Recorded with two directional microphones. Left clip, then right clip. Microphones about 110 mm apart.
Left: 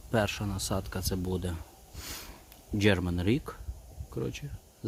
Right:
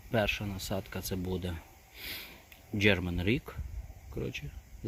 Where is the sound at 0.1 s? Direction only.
30° left (ahead or behind).